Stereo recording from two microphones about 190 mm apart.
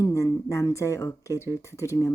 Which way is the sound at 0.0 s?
15° left (ahead or behind).